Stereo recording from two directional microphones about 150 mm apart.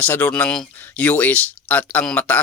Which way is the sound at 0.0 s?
10° left (ahead or behind).